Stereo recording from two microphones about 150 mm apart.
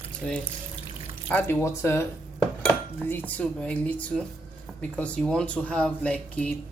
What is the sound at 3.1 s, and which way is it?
Speech, 10° left (ahead or behind).